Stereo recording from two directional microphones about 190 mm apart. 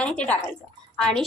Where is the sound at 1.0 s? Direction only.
5° left (ahead or behind).